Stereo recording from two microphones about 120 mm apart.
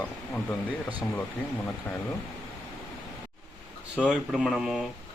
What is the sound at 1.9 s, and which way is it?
Speech, 20° left (ahead or behind).